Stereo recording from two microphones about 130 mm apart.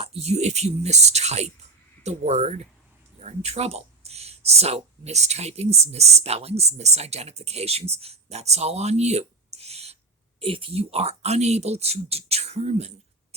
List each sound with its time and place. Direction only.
0.0 s speech: 50° right (ahead or behind)